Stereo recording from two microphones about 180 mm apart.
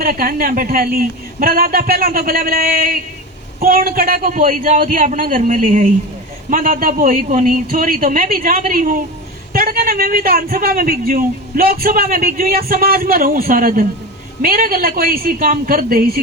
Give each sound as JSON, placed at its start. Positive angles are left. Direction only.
{"t": 0.0, "sound": "a man's voice", "side_deg": -55}